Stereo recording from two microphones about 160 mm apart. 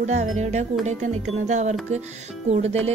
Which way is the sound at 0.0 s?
45° right (ahead or behind).